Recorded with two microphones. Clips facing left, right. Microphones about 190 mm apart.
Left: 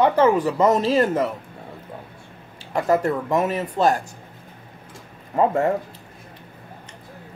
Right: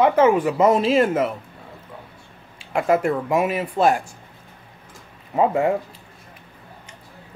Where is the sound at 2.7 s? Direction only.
10° right (ahead or behind).